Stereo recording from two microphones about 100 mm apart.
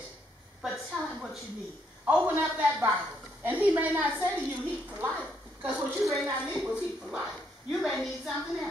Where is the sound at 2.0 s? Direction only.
15° right (ahead or behind).